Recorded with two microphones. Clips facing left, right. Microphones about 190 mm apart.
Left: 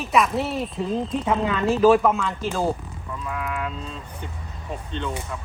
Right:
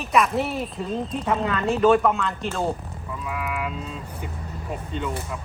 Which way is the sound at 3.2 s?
5° right (ahead or behind).